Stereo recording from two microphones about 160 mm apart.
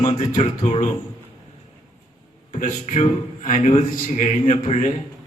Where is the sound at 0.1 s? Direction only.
45° left (ahead or behind).